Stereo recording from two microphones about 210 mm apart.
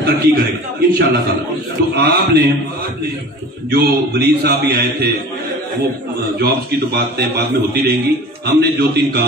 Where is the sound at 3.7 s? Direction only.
50° right (ahead or behind).